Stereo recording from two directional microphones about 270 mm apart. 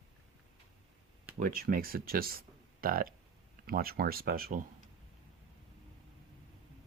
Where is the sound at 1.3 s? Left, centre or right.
Right.